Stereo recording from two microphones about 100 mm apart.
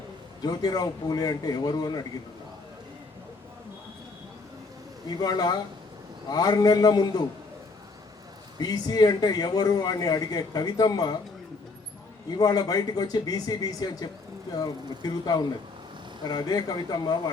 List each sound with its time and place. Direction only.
0.4 s a man's voice: 40° left (ahead or behind)
5.0 s a man's voice: 45° left (ahead or behind)
8.5 s a man's voice: 40° left (ahead or behind)
12.3 s a man's voice: 40° left (ahead or behind)